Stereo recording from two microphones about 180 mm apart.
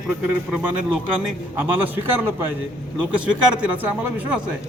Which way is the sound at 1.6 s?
10° right (ahead or behind).